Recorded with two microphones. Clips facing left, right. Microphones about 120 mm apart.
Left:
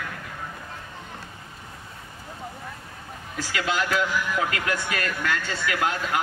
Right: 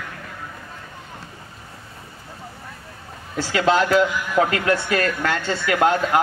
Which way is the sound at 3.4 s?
30° right (ahead or behind).